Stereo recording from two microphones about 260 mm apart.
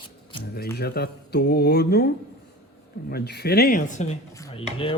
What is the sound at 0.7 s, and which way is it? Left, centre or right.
Speech, left.